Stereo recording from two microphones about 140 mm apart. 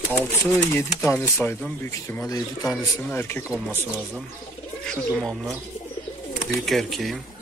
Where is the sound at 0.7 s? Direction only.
20° left (ahead or behind).